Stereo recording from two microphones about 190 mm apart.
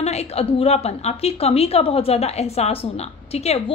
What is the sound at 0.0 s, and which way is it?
A woman's voice, 35° left (ahead or behind).